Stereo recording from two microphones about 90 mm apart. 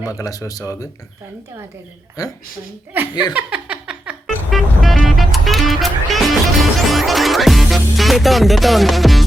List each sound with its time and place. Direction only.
0.0 s speech: 40° left (ahead or behind)
2.2 s speech: 40° left (ahead or behind)
2.9 s speech: 25° right (ahead or behind)
3.3 s a sound: 15° right (ahead or behind)
4.5 s music: centre (ahead or behind)